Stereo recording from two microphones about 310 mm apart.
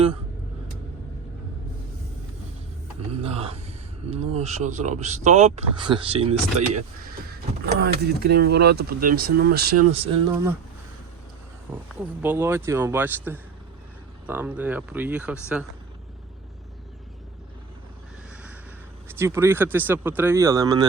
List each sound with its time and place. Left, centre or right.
3.1 s speech: centre
7.6 s speech: right; by 10.5 s centre
11.7 s speech: centre
19.0 s speech: centre